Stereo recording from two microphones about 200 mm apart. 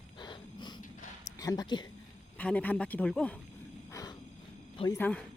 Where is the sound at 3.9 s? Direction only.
15° left (ahead or behind).